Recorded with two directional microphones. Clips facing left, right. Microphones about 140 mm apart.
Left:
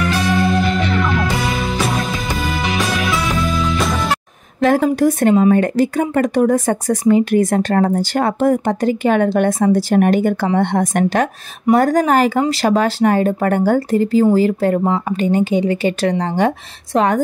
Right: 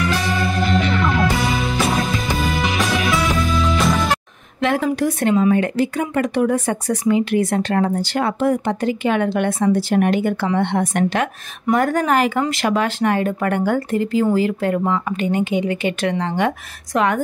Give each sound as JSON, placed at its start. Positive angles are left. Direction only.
{"t": 0.3, "sound": "music", "side_deg": 0}
{"t": 4.6, "sound": "speech", "side_deg": 40}